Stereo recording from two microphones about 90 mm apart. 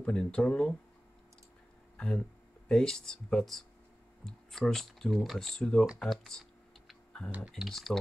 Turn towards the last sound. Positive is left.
turn(degrees=5)  # may be behind; listen again after turning